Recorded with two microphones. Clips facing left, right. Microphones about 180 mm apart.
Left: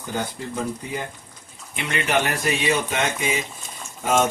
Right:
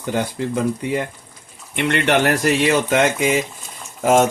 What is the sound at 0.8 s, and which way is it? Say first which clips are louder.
Speech: right 8 dB; 70° right (ahead or behind).